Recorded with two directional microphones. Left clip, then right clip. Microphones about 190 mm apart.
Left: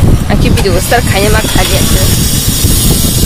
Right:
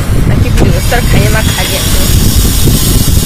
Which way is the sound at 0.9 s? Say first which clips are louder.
Left 3 dB; 30° left (ahead or behind).